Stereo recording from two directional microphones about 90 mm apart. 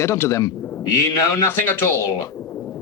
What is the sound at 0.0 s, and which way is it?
Speech, 35° left (ahead or behind).